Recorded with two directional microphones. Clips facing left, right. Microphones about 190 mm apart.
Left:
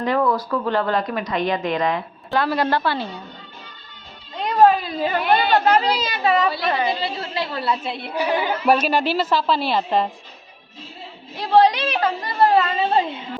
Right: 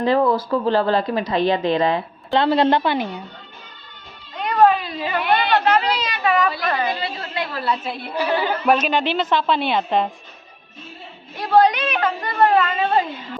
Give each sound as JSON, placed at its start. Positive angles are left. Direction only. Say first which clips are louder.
{"t": 0.0, "sound": "speech", "louder": "right 3 dB", "side_deg": -30}
{"t": 4.6, "sound": "a woman's voice", "louder": "left 1 dB", "side_deg": 40}
{"t": 8.2, "sound": "a woman's voice", "louder": "even", "side_deg": 15}
{"t": 11.3, "sound": "a woman's voice", "louder": "even", "side_deg": 30}